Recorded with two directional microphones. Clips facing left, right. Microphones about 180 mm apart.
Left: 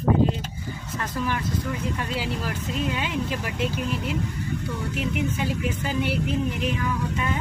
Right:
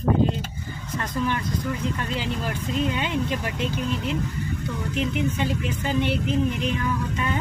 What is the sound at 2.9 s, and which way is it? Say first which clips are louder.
Speech: right 2 dB; 5° left (ahead or behind).